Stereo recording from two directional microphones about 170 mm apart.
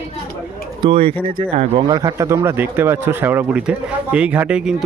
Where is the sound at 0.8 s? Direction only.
35° right (ahead or behind).